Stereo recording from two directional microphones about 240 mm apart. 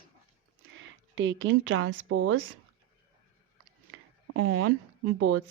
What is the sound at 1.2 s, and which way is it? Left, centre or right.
A woman's voice, right.